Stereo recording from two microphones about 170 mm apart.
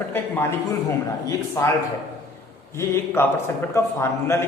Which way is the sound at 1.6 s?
15° left (ahead or behind).